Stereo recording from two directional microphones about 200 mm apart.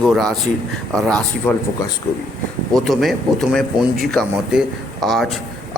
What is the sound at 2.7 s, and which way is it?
A man's voice, centre (ahead or behind).